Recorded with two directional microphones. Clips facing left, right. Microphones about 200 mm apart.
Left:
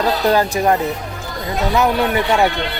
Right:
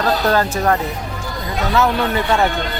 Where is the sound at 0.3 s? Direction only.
15° left (ahead or behind).